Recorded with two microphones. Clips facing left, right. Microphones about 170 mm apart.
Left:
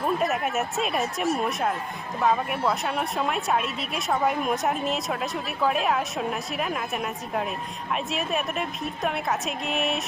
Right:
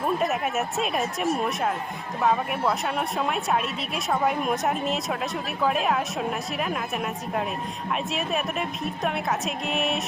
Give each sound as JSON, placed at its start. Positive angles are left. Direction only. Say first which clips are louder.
{"t": 0.0, "sound": "a woman's voice", "louder": "even", "side_deg": 0}